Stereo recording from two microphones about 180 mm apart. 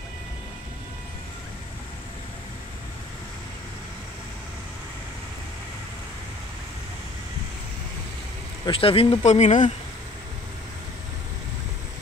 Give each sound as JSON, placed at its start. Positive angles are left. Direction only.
{"t": 8.6, "sound": "speech", "side_deg": 30}